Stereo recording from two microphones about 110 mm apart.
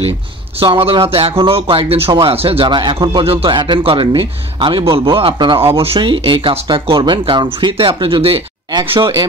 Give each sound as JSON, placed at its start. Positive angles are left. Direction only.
{"t": 0.6, "sound": "a man's voice", "side_deg": -60}